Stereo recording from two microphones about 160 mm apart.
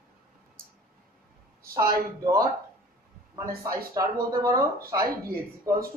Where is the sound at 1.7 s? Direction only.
20° right (ahead or behind).